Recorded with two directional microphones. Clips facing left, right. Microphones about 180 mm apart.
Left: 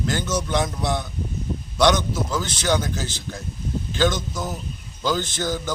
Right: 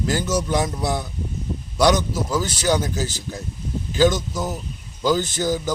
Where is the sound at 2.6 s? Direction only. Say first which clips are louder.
Right 1 dB; 10° right (ahead or behind).